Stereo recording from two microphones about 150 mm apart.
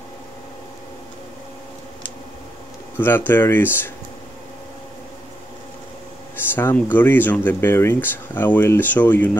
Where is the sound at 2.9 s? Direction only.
15° left (ahead or behind).